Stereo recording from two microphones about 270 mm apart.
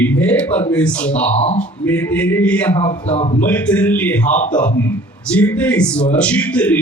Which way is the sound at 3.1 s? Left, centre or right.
Left.